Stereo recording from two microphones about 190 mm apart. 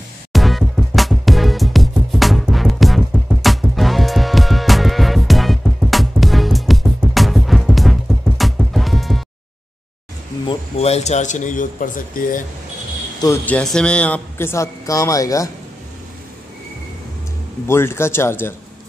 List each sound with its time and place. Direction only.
0.3 s music: centre (ahead or behind)
10.5 s a man's voice: 35° left (ahead or behind)
13.2 s speech: 15° left (ahead or behind)
13.6 s speech: 5° left (ahead or behind)
17.6 s speech: 15° left (ahead or behind)